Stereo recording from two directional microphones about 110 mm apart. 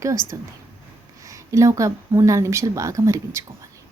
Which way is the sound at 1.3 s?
30° right (ahead or behind).